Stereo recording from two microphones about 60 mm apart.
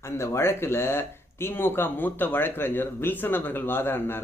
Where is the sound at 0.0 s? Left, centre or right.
Left.